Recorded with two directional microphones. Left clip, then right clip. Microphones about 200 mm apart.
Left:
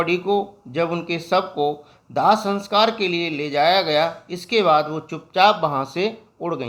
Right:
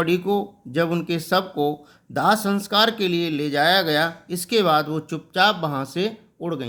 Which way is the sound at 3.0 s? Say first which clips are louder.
Even; 35° right (ahead or behind).